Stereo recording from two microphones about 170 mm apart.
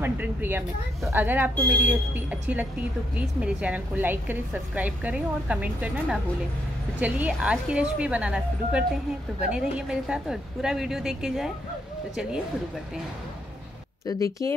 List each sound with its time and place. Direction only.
0.0 s a woman's voice: 10° right (ahead or behind)
14.0 s speech: 20° left (ahead or behind)